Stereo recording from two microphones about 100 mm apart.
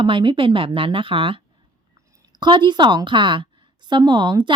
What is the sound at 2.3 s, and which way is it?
Speech, 50° right (ahead or behind).